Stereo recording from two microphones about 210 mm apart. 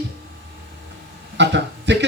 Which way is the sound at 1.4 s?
55° right (ahead or behind).